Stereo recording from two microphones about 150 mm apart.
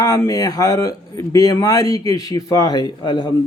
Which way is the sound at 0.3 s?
25° left (ahead or behind).